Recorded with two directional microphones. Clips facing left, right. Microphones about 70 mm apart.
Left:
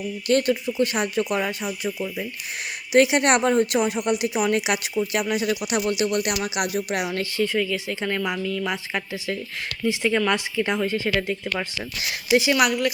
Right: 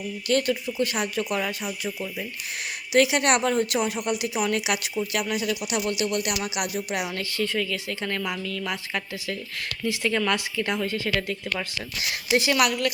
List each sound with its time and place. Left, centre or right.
0.3 s speech: left
2.9 s speech: left
12.3 s speech: centre